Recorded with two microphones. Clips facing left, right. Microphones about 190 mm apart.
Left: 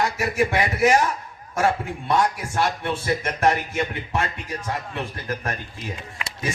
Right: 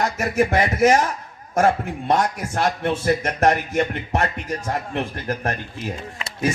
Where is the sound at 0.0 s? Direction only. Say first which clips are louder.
Right 2 dB; 40° right (ahead or behind).